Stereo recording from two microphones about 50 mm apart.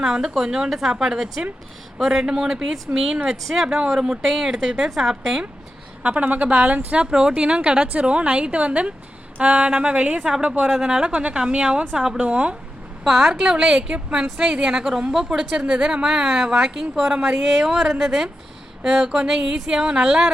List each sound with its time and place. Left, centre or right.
0.0 s a woman's voice: centre
6.0 s a woman's voice: right
7.1 s a woman's voice: centre
13.1 s a woman's voice: centre